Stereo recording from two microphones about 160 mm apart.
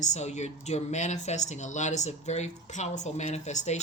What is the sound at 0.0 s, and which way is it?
Speech, 45° left (ahead or behind).